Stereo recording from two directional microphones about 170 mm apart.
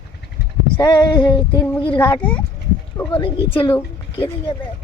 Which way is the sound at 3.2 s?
30° left (ahead or behind).